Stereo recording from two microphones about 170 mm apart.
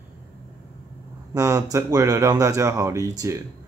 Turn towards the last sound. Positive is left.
turn(degrees=-20)  # may be behind; listen again after turning